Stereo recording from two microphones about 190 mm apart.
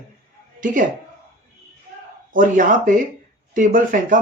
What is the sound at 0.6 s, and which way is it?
Speech, 45° right (ahead or behind).